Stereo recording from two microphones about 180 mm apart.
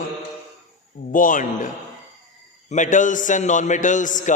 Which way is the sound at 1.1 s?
45° left (ahead or behind).